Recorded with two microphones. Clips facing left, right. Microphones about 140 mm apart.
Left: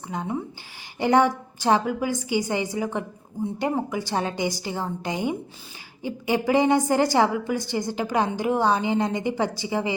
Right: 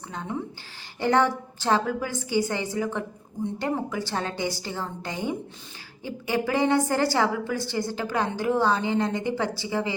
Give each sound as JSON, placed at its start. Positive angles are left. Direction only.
{"t": 0.1, "sound": "a woman's voice", "side_deg": 15}